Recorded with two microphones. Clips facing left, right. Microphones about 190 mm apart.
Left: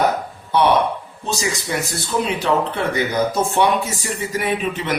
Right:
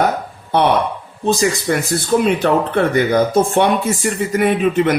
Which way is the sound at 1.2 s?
55° right (ahead or behind).